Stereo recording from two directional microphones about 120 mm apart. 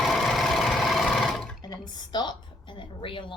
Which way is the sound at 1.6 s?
35° left (ahead or behind).